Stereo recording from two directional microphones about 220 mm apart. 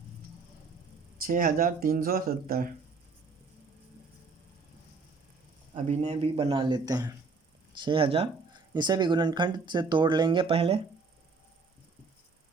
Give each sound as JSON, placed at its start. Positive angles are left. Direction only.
{"t": 1.3, "sound": "speech", "side_deg": -40}
{"t": 5.7, "sound": "speech", "side_deg": -25}